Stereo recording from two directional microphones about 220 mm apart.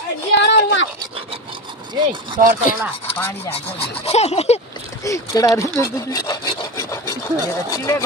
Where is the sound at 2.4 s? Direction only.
40° right (ahead or behind).